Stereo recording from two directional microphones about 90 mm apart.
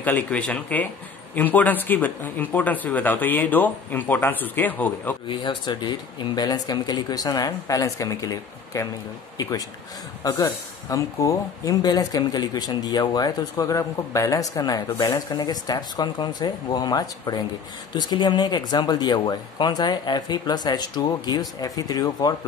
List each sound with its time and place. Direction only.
0.0 s speech: 15° left (ahead or behind)
5.3 s speech: 60° left (ahead or behind); by 22.3 s 45° left (ahead or behind)